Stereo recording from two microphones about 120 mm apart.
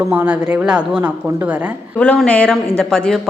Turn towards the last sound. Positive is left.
turn(degrees=5)  # may be behind; listen again after turning